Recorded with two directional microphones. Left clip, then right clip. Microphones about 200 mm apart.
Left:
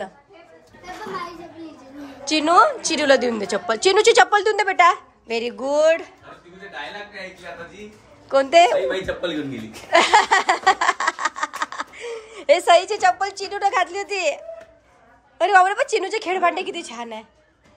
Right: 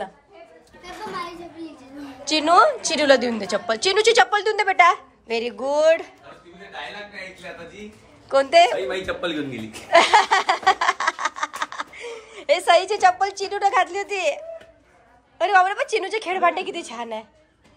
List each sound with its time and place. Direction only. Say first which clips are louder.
2.2 s a woman's voice: even; 15° left (ahead or behind)
8.3 s a woman's voice: left 1 dB; 15° left (ahead or behind)
9.8 s a sound: even; 15° left (ahead or behind)
15.3 s a woman's voice: left 2 dB; 20° left (ahead or behind)